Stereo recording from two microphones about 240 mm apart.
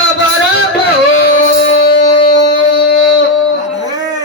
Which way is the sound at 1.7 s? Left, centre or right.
Left.